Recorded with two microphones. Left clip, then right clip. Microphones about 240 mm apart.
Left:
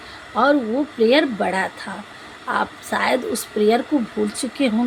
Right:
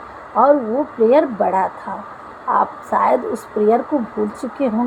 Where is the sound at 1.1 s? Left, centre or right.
Left.